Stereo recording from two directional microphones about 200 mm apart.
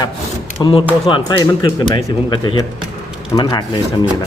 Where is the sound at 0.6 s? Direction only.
25° left (ahead or behind).